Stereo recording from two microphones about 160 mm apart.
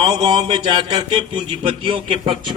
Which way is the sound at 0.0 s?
25° right (ahead or behind).